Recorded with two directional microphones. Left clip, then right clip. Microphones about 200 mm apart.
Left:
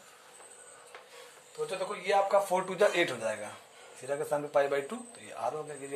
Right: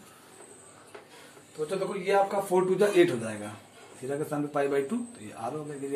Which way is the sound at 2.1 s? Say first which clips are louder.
Right 1 dB; 40° left (ahead or behind).